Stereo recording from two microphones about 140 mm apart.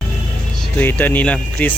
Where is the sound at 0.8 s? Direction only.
15° left (ahead or behind).